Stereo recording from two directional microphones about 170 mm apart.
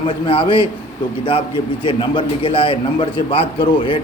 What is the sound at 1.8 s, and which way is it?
A man's voice, 30° left (ahead or behind).